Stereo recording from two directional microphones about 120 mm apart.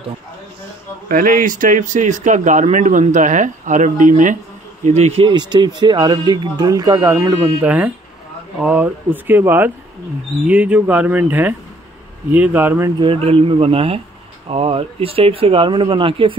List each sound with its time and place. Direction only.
1.4 s speech: 90° right
4.8 s speech: 65° right (ahead or behind)
5.2 s speech: 40° right (ahead or behind)
7.6 s speech: 10° right (ahead or behind)
13.0 s speech: 50° right (ahead or behind)